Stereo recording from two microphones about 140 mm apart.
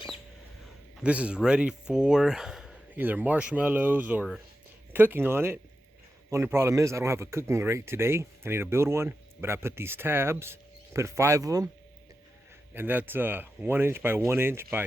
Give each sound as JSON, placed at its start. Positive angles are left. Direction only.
{"t": 1.0, "sound": "speech", "side_deg": -10}
{"t": 12.7, "sound": "speech", "side_deg": -15}